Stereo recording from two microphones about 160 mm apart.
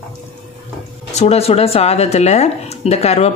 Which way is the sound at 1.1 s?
40° left (ahead or behind).